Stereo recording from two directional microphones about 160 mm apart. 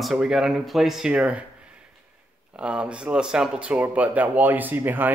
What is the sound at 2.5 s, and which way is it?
Speech, 5° right (ahead or behind).